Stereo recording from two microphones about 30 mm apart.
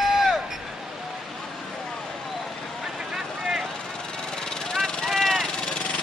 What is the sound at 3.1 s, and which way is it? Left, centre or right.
Vehicle, centre.